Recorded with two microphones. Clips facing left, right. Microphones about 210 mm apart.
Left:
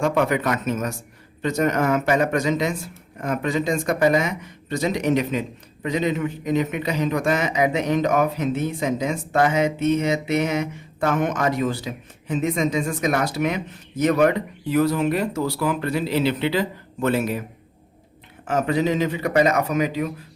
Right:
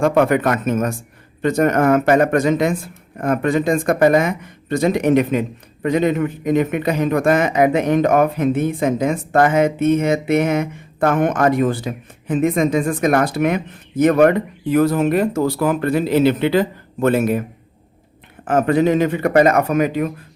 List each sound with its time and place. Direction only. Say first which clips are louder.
0.0 s speech: right 6 dB; 55° right (ahead or behind)
18.4 s speech: right 6 dB; 55° right (ahead or behind)